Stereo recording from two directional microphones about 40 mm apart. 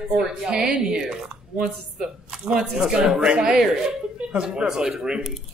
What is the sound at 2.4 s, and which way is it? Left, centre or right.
Speech, centre.